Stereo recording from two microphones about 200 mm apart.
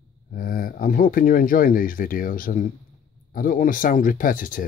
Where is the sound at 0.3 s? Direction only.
45° left (ahead or behind).